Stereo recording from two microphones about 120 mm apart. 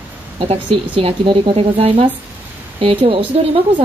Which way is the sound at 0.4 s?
55° right (ahead or behind).